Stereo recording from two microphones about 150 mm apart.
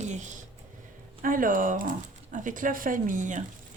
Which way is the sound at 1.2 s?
65° right (ahead or behind).